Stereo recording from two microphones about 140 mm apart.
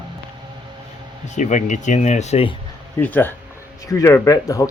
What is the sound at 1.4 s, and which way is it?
Speech, 60° left (ahead or behind).